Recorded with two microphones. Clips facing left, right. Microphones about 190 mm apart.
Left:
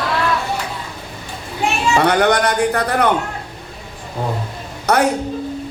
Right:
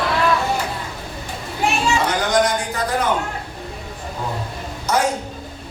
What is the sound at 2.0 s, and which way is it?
A man's voice, 65° left (ahead or behind).